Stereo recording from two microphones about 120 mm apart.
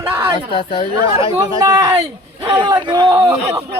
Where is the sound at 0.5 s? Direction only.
50° left (ahead or behind).